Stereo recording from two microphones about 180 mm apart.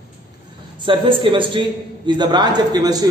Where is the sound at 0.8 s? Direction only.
30° right (ahead or behind).